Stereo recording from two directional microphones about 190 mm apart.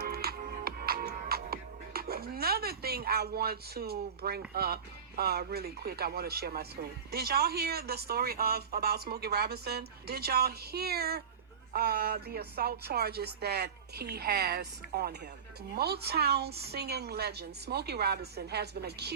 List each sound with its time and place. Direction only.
0.0 s music: 55° right (ahead or behind)
7.1 s speech: 55° right (ahead or behind)